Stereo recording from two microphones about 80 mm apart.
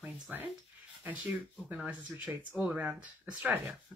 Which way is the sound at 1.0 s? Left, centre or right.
Right.